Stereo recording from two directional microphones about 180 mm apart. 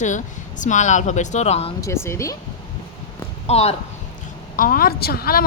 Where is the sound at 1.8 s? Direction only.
15° left (ahead or behind).